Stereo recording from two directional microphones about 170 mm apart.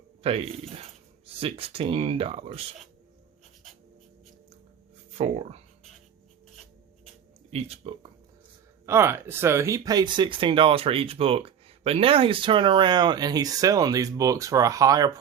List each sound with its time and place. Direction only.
0.2 s speech: 35° right (ahead or behind)
5.1 s speech: 35° right (ahead or behind)
7.5 s speech: 35° right (ahead or behind)
8.9 s speech: 15° right (ahead or behind)